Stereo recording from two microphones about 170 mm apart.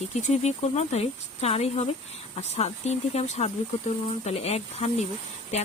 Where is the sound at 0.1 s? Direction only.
40° left (ahead or behind).